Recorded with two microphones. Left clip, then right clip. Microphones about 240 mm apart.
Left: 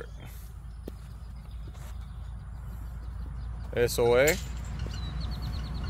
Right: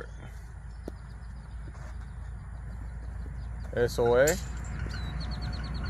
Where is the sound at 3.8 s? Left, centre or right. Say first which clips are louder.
Left 1 dB; left.